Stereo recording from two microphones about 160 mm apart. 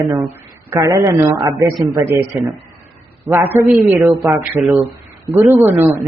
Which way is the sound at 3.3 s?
15° right (ahead or behind).